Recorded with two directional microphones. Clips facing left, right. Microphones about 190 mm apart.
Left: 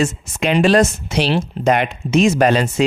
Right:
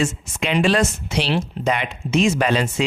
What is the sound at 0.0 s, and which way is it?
Speech, 40° left (ahead or behind).